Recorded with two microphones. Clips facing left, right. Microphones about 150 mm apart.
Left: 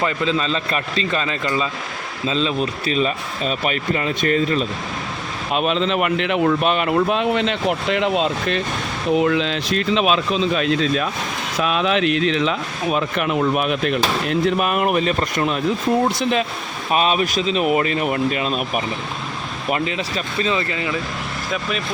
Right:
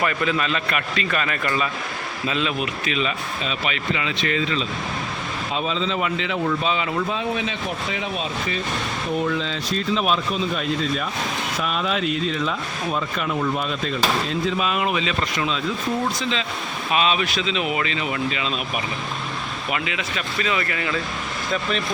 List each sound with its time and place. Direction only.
0.0 s a man's voice: 25° left (ahead or behind); by 4.6 s 45° left (ahead or behind)
5.5 s speech: 70° left (ahead or behind)
16.9 s speech: 45° left (ahead or behind)
19.7 s speech: 40° left (ahead or behind); by 21.0 s 20° left (ahead or behind)